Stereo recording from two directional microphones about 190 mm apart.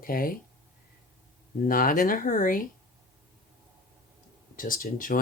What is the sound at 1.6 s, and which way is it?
Speech, 45° left (ahead or behind).